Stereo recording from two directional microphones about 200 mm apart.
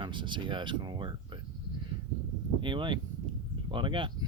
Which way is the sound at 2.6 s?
25° right (ahead or behind).